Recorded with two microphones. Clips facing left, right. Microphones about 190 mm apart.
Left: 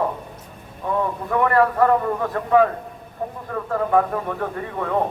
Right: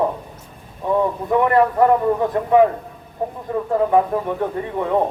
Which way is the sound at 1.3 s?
20° right (ahead or behind).